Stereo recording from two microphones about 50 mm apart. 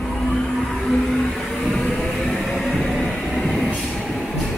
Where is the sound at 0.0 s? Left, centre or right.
Centre.